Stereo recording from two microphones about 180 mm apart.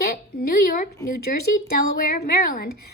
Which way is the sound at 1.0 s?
50° left (ahead or behind).